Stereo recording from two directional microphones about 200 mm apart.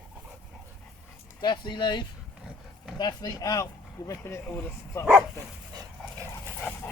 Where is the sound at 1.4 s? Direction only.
20° left (ahead or behind).